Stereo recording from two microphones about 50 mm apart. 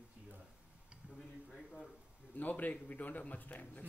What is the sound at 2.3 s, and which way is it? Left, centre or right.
A man's voice, left.